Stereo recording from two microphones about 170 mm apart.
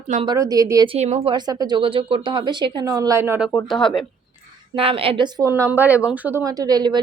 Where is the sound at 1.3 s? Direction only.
25° right (ahead or behind).